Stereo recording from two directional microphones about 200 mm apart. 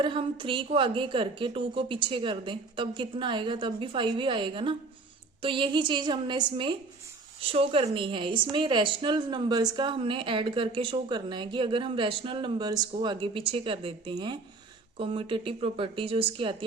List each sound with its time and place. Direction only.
0.0 s a woman's voice: 25° right (ahead or behind)